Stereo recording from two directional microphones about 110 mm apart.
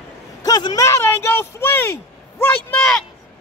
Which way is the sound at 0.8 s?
25° left (ahead or behind).